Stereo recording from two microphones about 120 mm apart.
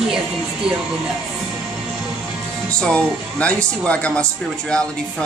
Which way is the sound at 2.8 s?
10° left (ahead or behind).